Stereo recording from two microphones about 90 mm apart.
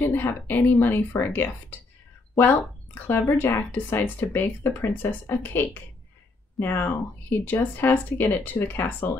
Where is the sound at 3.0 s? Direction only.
25° left (ahead or behind).